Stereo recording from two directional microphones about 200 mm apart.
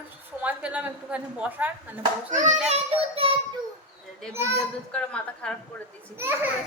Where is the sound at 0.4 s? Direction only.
5° right (ahead or behind).